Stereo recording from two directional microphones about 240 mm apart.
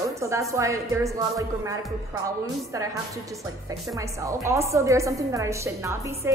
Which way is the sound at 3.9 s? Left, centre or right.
Centre.